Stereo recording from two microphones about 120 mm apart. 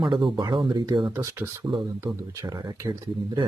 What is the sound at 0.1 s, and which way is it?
Speech, 40° right (ahead or behind).